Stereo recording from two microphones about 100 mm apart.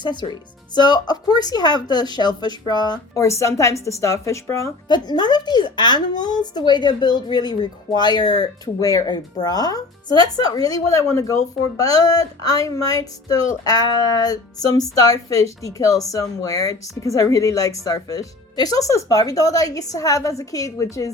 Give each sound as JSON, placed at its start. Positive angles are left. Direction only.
{"t": 0.0, "sound": "a woman's voice", "side_deg": 50}
{"t": 3.2, "sound": "speech", "side_deg": 30}
{"t": 4.9, "sound": "a woman's voice", "side_deg": 45}